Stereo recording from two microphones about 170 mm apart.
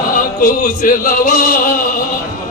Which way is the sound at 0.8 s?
55° left (ahead or behind).